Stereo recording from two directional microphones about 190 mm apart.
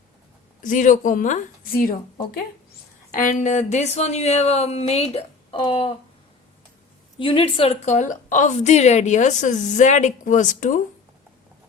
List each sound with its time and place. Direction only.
0.6 s a woman's voice: 40° left (ahead or behind)
3.1 s a woman's voice: 45° left (ahead or behind); by 5.9 s 25° left (ahead or behind)
7.2 s a woman's voice: 30° left (ahead or behind); by 10.8 s 45° left (ahead or behind)